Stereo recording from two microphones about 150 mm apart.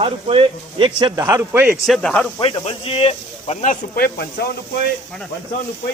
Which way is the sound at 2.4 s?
40° left (ahead or behind).